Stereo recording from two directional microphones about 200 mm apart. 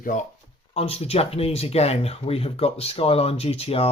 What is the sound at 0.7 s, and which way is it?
Speech, 30° left (ahead or behind).